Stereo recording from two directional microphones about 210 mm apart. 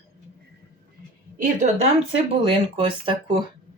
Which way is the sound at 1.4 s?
35° right (ahead or behind).